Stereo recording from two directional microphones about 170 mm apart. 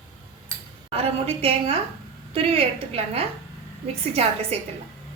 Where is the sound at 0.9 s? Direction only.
35° right (ahead or behind).